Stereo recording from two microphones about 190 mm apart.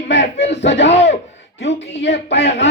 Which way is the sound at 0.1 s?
65° left (ahead or behind).